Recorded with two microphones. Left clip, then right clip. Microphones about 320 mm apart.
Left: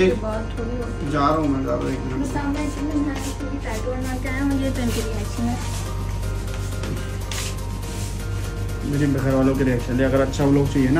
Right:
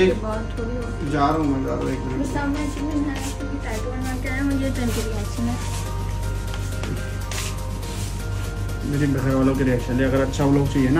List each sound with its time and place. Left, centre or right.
0.0 s speech: centre
1.9 s music: centre
8.9 s speech: centre